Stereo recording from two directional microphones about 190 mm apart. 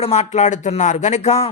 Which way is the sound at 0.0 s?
35° left (ahead or behind).